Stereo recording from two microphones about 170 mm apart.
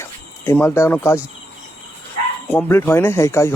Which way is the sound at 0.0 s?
15° left (ahead or behind).